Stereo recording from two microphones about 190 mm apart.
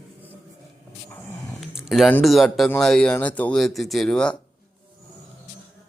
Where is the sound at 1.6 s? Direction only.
Centre (ahead or behind).